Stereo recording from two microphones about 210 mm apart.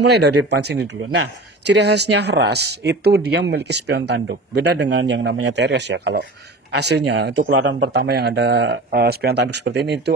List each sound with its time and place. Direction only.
0.0 s speech: 50° right (ahead or behind)